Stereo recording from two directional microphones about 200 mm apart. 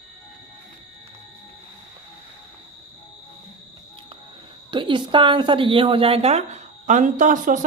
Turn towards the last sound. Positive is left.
turn(degrees=-40)  # may be behind; listen again after turning